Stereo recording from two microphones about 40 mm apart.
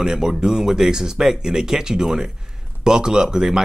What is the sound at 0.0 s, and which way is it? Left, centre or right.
Speech, centre.